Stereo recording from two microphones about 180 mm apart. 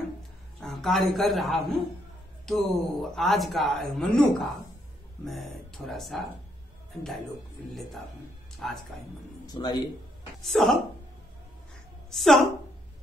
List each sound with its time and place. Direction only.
0.6 s a man's voice: centre (ahead or behind)
8.6 s speech: centre (ahead or behind)
9.5 s speech: 20° left (ahead or behind)
10.4 s speech: centre (ahead or behind)
12.1 s a woman's voice: centre (ahead or behind)